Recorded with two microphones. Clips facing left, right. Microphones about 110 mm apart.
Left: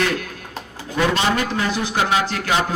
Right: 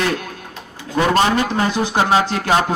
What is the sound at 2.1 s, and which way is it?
Speech, 30° right (ahead or behind).